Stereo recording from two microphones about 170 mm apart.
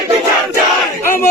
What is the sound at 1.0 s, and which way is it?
Battle cry, 15° left (ahead or behind).